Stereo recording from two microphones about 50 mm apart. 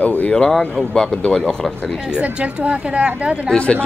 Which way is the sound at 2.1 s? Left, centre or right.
Right.